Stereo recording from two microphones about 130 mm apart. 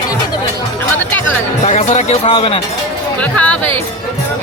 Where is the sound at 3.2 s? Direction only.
10° left (ahead or behind).